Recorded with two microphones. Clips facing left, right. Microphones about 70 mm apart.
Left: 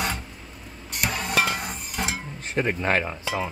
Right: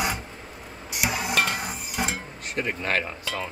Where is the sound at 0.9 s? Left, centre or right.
Centre.